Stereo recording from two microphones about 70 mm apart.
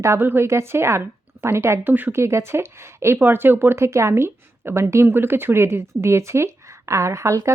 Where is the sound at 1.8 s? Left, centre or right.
Right.